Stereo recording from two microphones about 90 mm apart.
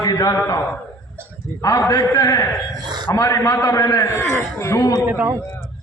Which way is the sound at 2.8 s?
55° right (ahead or behind).